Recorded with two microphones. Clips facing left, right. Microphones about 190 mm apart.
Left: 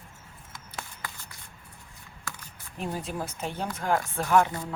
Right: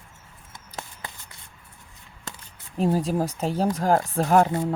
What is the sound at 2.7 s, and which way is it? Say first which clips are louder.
Speech: right 10 dB; 35° right (ahead or behind).